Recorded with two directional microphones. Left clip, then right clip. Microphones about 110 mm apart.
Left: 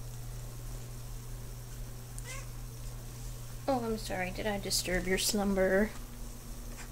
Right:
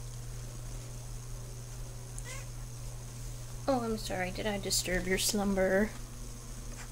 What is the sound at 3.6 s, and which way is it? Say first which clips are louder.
Speech: right 1 dB; 20° right (ahead or behind).